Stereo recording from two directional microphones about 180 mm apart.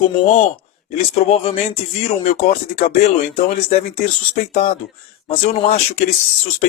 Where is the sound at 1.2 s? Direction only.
35° left (ahead or behind).